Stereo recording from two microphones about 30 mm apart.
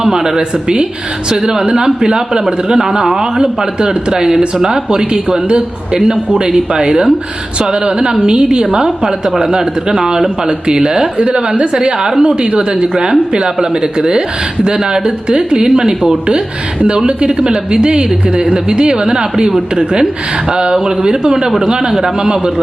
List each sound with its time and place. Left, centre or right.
0.0 s a woman's voice: centre
9.4 s a woman's voice: right
11.2 s a woman's voice: right